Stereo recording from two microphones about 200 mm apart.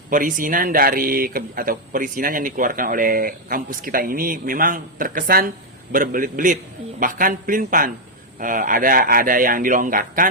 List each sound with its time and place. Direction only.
0.1 s speech: 40° right (ahead or behind)